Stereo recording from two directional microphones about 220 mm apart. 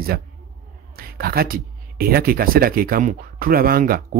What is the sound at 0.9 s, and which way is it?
Speech, 40° right (ahead or behind).